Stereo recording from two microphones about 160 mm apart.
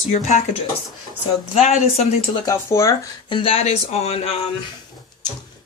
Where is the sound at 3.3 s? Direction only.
35° left (ahead or behind).